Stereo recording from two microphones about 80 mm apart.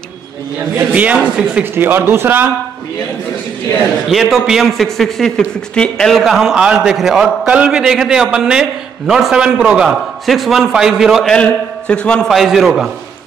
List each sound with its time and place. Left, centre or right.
0.7 s a man's voice: centre
1.6 s speech: right
4.1 s a man's voice: centre
9.8 s a man's voice: centre
11.9 s a man's voice: centre
12.3 s a man's voice: centre